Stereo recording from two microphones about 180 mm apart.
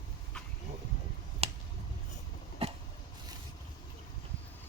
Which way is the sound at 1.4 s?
35° right (ahead or behind).